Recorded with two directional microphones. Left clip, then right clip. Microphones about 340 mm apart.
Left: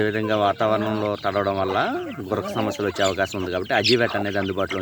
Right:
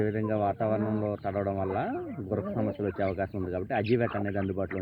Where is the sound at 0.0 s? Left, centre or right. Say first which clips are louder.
Left 8 dB; centre.